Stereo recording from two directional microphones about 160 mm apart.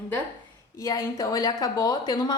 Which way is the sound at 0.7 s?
20° left (ahead or behind).